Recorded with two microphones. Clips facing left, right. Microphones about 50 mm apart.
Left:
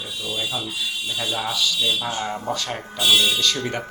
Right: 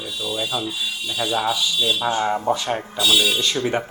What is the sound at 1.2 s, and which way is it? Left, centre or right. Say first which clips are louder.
Speech: right 4 dB; right.